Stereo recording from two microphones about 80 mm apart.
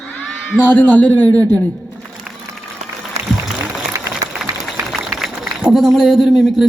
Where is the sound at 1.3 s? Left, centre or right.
Centre.